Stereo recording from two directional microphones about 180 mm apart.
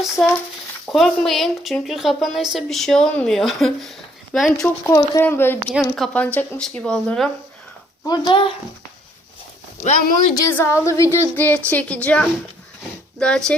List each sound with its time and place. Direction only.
0.9 s a woman's voice: 5° left (ahead or behind)
4.6 s a woman's voice: 15° left (ahead or behind)
8.0 s speech: 25° left (ahead or behind)
9.8 s speech: 45° left (ahead or behind)
10.3 s a woman's voice: 15° left (ahead or behind)